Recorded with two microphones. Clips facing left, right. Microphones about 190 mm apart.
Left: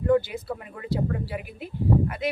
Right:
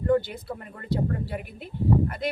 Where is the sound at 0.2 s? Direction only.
5° left (ahead or behind).